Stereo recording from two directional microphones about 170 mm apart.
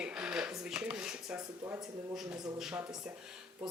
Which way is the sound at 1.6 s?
15° right (ahead or behind).